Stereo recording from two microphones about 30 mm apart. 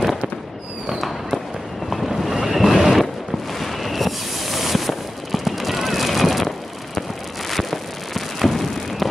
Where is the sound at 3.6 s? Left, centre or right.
Centre.